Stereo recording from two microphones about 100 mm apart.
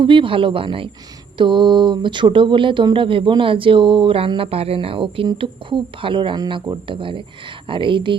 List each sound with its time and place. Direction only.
0.0 s speech: 60° right (ahead or behind)